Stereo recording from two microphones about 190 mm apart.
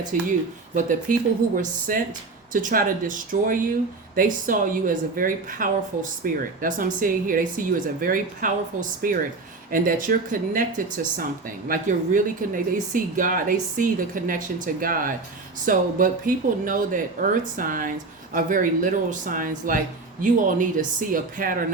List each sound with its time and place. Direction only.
0.1 s a woman's voice: 45° right (ahead or behind)